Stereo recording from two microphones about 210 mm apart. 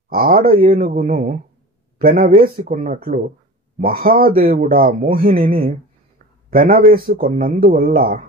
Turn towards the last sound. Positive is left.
turn(degrees=-40)  # may be behind; listen again after turning